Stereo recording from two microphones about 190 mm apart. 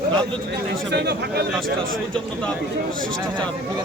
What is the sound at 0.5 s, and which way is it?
Speech, 60° right (ahead or behind).